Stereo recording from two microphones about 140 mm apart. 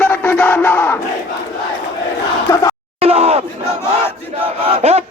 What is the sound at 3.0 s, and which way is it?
Crowd, 45° right (ahead or behind).